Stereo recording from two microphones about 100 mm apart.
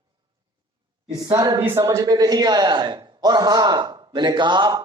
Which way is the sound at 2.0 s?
40° right (ahead or behind).